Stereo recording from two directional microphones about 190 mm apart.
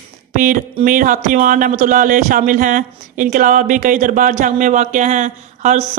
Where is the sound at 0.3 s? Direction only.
45° right (ahead or behind).